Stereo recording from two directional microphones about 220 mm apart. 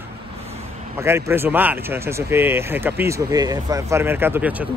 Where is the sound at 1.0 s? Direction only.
10° right (ahead or behind).